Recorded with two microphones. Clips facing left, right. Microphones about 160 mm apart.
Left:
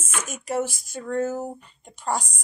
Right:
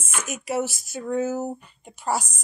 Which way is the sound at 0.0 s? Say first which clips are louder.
Right 1 dB; 10° right (ahead or behind).